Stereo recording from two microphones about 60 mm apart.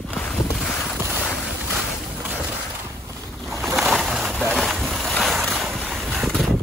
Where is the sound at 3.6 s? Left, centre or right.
Centre.